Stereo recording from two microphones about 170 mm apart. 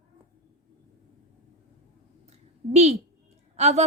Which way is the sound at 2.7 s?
40° right (ahead or behind).